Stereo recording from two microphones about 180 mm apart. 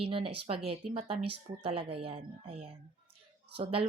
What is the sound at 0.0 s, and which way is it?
Speech, 30° right (ahead or behind).